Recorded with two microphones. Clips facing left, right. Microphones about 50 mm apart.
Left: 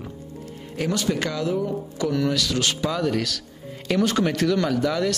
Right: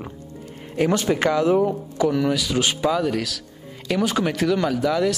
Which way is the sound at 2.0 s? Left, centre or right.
Centre.